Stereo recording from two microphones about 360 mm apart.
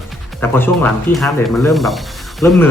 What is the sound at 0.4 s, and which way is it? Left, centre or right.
Speech, centre.